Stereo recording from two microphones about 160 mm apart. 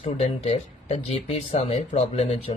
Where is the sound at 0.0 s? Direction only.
40° left (ahead or behind).